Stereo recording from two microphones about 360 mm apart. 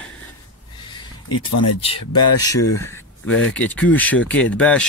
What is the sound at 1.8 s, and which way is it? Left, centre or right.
Speech, centre.